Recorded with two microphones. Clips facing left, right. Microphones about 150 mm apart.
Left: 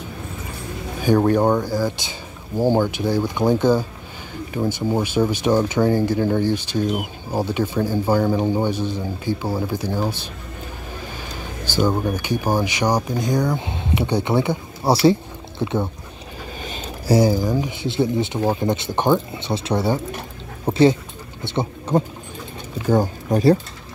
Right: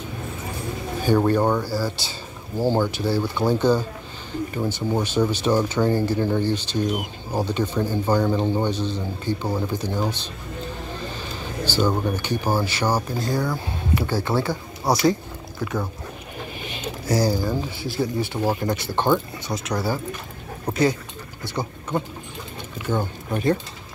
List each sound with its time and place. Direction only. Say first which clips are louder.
1.0 s speech: left 3 dB; 10° left (ahead or behind)
11.6 s speech: left 2 dB; 15° left (ahead or behind)
16.6 s a sound: even; 40° left (ahead or behind)
17.1 s speech: left 5 dB; 20° left (ahead or behind)
22.8 s speech: left 7 dB; 40° left (ahead or behind)